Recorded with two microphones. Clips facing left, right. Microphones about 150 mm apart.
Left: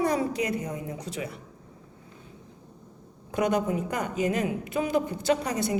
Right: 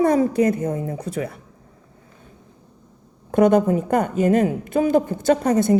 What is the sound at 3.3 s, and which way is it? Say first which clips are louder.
A woman's voice: right 10 dB; 50° right (ahead or behind).